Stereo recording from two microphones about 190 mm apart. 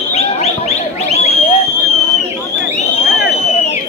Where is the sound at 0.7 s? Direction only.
35° left (ahead or behind).